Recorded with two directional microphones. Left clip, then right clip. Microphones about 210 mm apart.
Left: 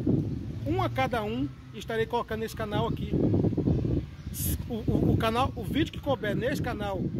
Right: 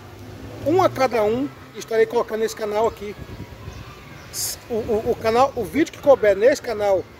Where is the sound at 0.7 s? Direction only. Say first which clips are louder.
Right 11 dB; 5° right (ahead or behind).